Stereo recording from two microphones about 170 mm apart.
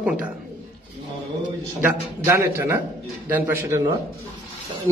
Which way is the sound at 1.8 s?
15° right (ahead or behind).